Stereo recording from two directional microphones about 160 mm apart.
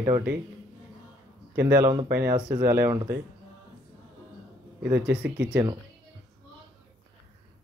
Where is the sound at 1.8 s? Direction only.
25° right (ahead or behind).